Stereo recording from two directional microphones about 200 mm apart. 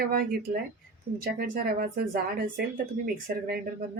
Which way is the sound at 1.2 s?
50° right (ahead or behind).